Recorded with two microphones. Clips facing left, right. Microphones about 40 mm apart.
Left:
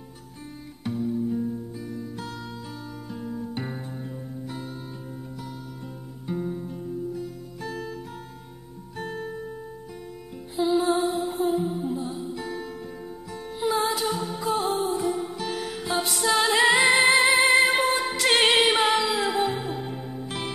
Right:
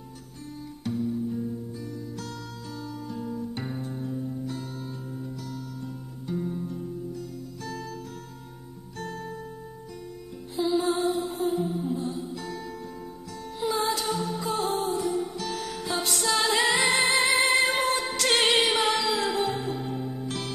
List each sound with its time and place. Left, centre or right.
0.8 s music: centre
4.0 s music: left
6.2 s music: centre
10.5 s music: centre
11.1 s music: centre
11.4 s music: centre
19.1 s music: centre